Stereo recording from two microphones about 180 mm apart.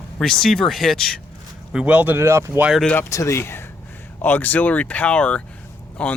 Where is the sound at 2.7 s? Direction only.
5° left (ahead or behind).